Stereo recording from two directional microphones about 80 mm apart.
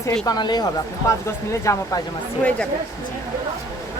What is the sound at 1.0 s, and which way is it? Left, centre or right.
Speech, left.